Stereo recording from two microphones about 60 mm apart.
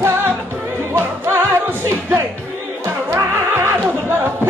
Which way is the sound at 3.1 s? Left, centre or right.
Right.